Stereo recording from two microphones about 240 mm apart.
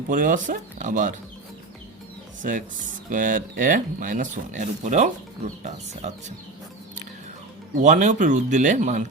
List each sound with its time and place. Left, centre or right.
0.1 s speech: right
2.4 s speech: right
7.8 s speech: right